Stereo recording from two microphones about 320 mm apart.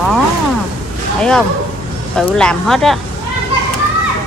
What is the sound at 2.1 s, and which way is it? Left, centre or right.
Speech, centre.